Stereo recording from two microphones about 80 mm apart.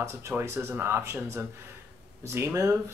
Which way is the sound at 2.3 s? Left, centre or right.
Right.